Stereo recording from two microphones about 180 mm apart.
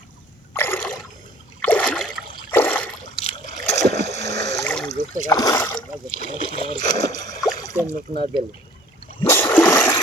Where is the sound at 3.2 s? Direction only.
35° left (ahead or behind).